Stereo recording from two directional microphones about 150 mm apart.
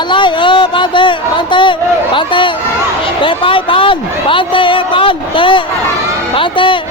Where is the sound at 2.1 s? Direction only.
35° left (ahead or behind).